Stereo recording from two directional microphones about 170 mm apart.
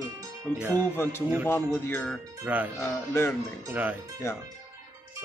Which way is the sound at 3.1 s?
15° left (ahead or behind).